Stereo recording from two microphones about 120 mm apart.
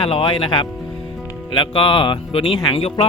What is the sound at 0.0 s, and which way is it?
Speech, 45° left (ahead or behind).